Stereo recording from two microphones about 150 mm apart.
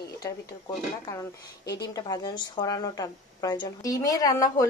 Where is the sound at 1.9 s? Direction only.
25° left (ahead or behind).